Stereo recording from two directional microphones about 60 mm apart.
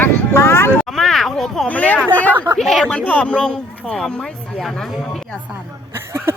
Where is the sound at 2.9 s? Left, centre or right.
Centre.